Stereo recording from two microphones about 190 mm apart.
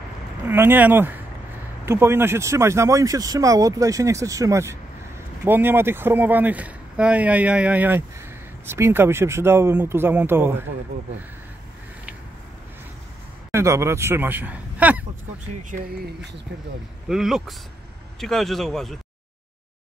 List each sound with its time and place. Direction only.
0.5 s speech: 10° right (ahead or behind)
13.5 s speech: 15° right (ahead or behind)
17.1 s speech: centre (ahead or behind)